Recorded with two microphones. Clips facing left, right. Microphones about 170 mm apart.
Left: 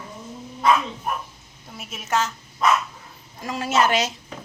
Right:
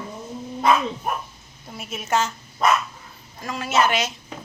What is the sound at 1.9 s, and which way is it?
Speech, centre (ahead or behind).